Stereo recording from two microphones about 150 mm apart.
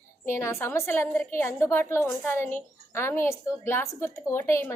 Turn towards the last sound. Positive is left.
turn(degrees=15)  # may be behind; listen again after turning